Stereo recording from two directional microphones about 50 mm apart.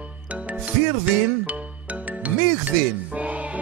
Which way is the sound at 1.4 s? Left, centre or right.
Right.